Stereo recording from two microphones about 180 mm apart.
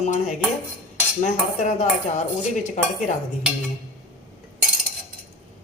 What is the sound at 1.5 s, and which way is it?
Speech, 40° left (ahead or behind).